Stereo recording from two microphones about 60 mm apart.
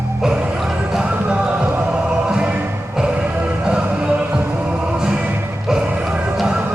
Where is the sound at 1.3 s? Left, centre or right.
Centre.